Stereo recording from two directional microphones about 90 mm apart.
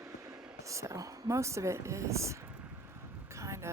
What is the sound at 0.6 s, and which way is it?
Speech, 35° right (ahead or behind).